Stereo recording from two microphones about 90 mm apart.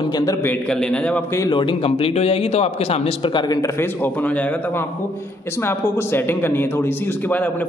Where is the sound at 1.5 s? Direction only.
65° left (ahead or behind); by 2.4 s 90° left.